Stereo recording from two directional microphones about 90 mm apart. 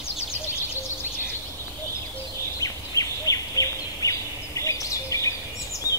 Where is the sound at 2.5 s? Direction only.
40° left (ahead or behind).